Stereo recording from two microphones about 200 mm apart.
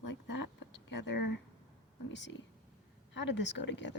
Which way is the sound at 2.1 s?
65° left (ahead or behind).